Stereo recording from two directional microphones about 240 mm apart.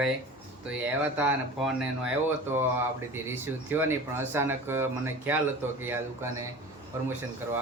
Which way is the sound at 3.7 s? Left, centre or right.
Centre.